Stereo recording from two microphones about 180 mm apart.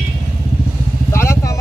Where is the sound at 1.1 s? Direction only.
15° left (ahead or behind).